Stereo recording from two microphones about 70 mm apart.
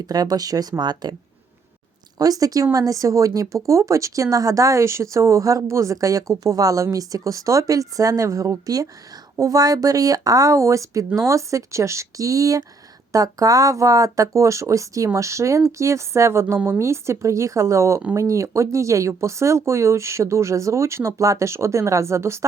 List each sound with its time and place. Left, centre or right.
0.0 s speech: right
2.1 s speech: right